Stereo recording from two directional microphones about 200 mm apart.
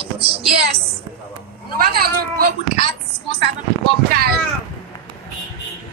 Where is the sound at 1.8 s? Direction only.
50° right (ahead or behind).